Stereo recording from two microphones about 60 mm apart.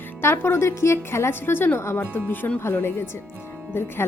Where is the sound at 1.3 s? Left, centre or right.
Left.